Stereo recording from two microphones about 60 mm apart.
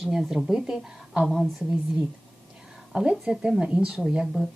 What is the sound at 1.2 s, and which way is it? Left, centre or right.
Speech, centre.